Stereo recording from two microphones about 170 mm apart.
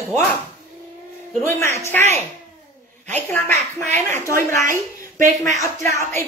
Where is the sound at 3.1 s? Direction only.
10° left (ahead or behind).